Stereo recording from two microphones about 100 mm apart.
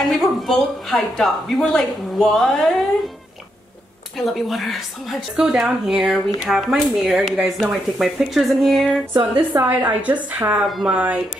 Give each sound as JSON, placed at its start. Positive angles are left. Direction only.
{"t": 0.1, "sound": "a woman's voice", "side_deg": 0}
{"t": 4.2, "sound": "a woman's voice", "side_deg": 0}
{"t": 9.1, "sound": "a woman's voice", "side_deg": -20}
{"t": 10.7, "sound": "a woman's voice", "side_deg": 0}